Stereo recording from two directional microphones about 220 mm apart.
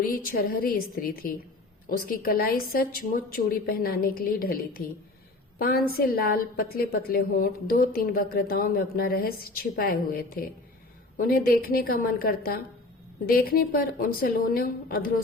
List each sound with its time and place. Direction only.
0.0 s a woman's voice: 40° left (ahead or behind)